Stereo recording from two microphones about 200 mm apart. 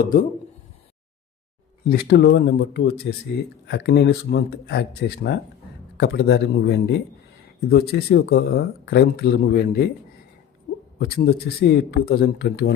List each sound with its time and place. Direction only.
0.0 s speech: 40° left (ahead or behind)
1.9 s speech: 55° left (ahead or behind)
11.0 s speech: 50° left (ahead or behind)